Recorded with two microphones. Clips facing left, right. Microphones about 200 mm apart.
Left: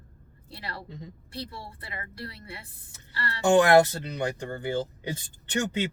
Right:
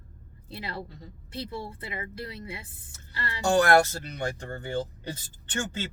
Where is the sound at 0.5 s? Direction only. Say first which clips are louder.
Right 3 dB; 20° right (ahead or behind).